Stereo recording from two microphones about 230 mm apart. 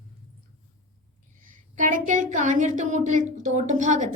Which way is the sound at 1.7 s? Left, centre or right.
Right.